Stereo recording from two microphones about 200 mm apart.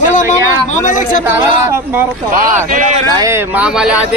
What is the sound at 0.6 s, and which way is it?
Speech, 40° left (ahead or behind).